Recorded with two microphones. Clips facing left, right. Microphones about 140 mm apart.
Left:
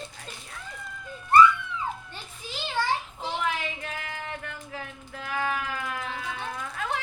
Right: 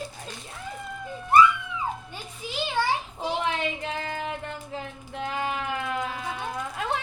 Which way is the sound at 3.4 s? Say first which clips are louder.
Right 1 dB; 25° right (ahead or behind).